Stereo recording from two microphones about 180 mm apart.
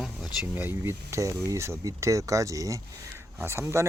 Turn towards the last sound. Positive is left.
turn(degrees=-15)  # may be behind; listen again after turning